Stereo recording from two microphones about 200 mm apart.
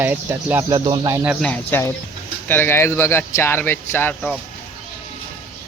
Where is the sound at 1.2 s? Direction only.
5° right (ahead or behind).